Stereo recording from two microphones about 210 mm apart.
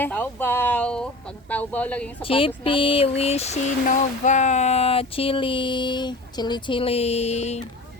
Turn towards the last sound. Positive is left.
turn(degrees=30)  # may be behind; listen again after turning